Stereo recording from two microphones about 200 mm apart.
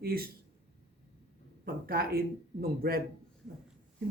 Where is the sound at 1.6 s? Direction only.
50° right (ahead or behind).